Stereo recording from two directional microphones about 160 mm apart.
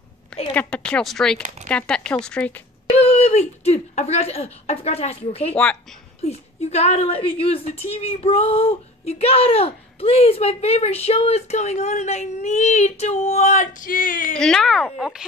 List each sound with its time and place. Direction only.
0.3 s a woman's voice: 10° left (ahead or behind)
2.9 s speech: 40° left (ahead or behind)
5.5 s speech: 5° left (ahead or behind)
6.7 s speech: 40° left (ahead or behind); by 14.3 s 55° left (ahead or behind)
14.3 s speech: 5° left (ahead or behind)